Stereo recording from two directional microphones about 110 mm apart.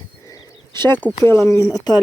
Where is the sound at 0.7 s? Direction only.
45° right (ahead or behind).